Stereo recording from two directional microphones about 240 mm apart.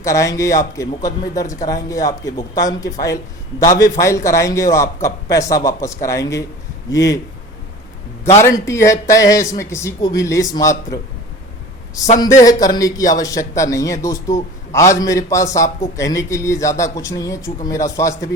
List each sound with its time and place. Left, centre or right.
0.0 s a man's voice: centre
8.4 s a man's voice: centre
12.4 s a man's voice: centre